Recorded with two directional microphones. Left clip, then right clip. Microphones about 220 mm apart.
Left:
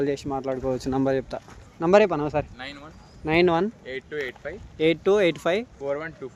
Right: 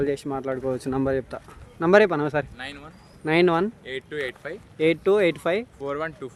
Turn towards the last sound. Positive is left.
turn(degrees=-50)  # may be behind; listen again after turning